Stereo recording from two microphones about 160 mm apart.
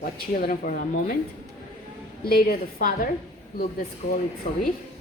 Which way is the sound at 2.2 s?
70° left (ahead or behind).